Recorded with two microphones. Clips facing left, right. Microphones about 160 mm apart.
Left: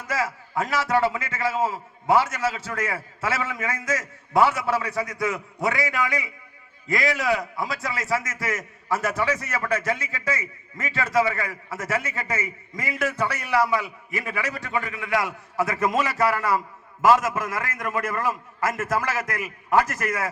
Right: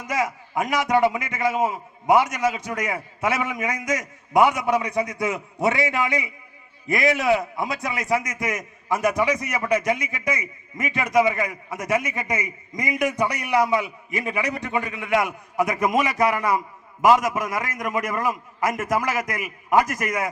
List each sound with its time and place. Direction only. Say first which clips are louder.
0.0 s a man's voice: right 2 dB; 15° right (ahead or behind)